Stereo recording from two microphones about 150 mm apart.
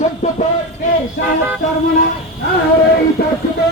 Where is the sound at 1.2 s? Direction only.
90° left.